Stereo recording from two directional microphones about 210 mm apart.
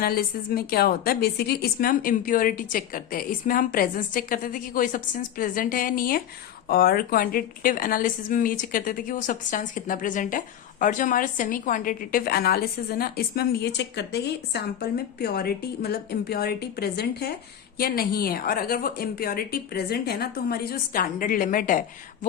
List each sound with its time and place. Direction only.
0.0 s a woman's voice: 45° left (ahead or behind)